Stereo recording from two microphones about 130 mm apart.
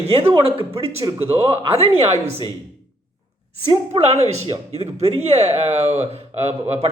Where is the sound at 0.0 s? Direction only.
50° right (ahead or behind).